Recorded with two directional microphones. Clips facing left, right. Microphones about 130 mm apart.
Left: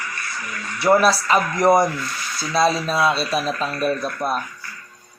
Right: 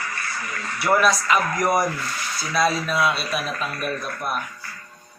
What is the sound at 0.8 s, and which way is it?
Speech, 30° left (ahead or behind).